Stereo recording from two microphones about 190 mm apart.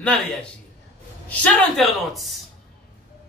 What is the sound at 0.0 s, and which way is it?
A man's voice, 5° left (ahead or behind).